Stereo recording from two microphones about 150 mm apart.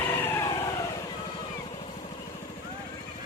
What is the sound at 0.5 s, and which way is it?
Vehicle, 25° left (ahead or behind).